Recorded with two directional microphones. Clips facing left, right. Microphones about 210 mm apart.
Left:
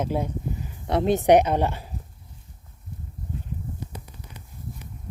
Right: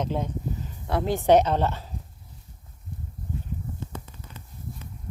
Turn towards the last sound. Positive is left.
turn(degrees=15)  # may be behind; listen again after turning